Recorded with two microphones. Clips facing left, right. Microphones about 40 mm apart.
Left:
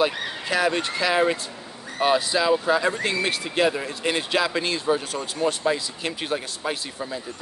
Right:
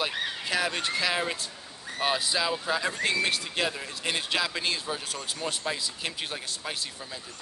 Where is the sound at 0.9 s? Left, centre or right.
Centre.